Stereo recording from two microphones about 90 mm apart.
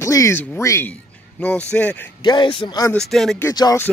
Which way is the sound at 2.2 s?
60° left (ahead or behind).